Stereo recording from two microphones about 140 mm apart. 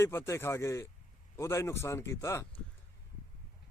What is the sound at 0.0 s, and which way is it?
Speech, 20° left (ahead or behind).